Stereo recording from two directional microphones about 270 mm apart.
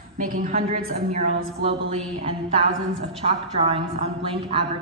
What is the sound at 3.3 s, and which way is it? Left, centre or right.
A woman's voice, right.